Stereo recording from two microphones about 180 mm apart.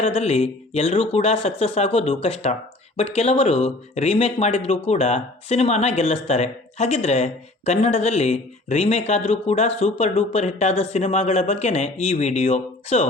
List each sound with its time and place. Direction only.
0.0 s speech: 35° left (ahead or behind)